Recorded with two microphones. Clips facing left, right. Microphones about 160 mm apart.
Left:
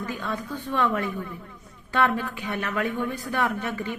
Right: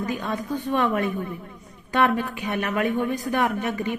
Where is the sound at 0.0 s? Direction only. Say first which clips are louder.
Right 3 dB; 15° right (ahead or behind).